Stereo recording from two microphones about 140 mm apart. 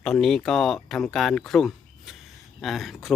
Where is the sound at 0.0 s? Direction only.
5° left (ahead or behind).